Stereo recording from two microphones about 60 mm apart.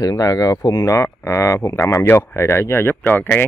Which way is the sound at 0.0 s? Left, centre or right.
Left.